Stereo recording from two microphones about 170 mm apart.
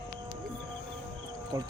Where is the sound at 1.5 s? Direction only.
20° right (ahead or behind).